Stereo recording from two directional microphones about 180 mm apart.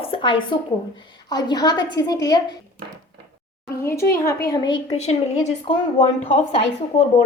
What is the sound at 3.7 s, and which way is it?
A woman's voice, 15° left (ahead or behind).